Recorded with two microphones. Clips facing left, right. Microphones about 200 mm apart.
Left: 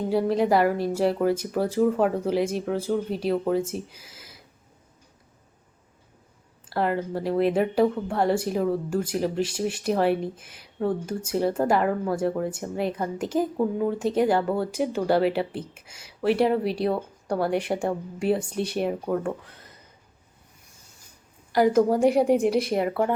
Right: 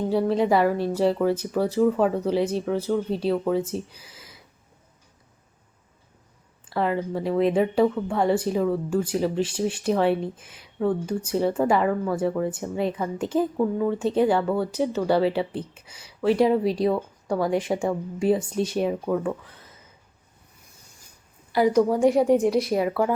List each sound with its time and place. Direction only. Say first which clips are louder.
0.1 s speech: even; 10° left (ahead or behind)
6.7 s speech: right 1 dB; 5° left (ahead or behind)
21.5 s a woman's voice: even; 45° left (ahead or behind)
22.5 s speech: right 1 dB; centre (ahead or behind)